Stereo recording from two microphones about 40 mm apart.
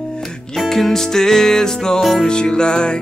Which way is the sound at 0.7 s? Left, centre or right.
Centre.